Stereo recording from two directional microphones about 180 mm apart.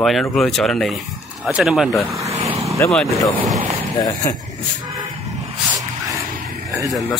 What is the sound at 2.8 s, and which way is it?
Speech, 10° left (ahead or behind).